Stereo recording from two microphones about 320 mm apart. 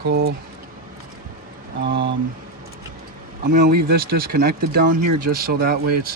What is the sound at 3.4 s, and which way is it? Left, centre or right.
Speech, right.